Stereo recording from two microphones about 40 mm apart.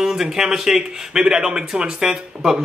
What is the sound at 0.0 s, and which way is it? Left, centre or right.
Speech, centre.